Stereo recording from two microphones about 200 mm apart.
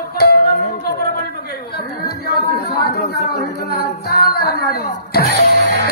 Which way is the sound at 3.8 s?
50° left (ahead or behind).